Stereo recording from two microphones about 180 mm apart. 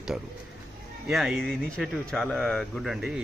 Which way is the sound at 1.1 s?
Centre (ahead or behind).